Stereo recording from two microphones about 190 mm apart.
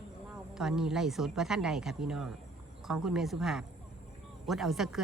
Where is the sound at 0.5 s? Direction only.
Centre (ahead or behind).